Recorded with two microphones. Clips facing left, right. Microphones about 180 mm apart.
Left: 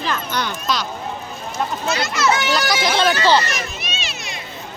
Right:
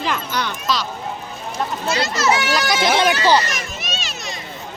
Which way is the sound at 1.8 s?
30° right (ahead or behind).